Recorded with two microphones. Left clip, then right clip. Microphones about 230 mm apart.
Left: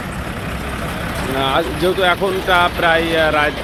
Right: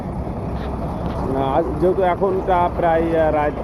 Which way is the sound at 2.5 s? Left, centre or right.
Centre.